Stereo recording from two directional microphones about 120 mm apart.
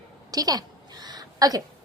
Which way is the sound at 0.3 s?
30° right (ahead or behind).